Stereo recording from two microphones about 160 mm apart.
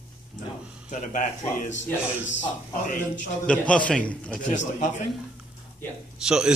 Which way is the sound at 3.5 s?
5° left (ahead or behind).